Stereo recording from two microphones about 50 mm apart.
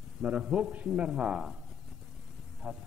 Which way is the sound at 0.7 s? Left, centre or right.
Right.